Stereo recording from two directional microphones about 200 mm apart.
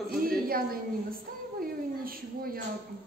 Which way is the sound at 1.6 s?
45° right (ahead or behind).